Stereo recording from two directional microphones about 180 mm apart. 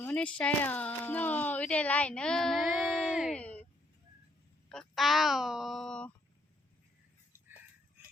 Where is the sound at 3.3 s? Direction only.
5° left (ahead or behind).